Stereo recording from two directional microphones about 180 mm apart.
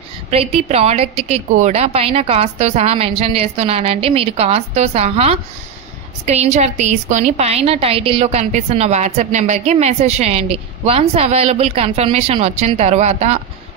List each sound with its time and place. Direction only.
0.3 s a woman's voice: 35° right (ahead or behind)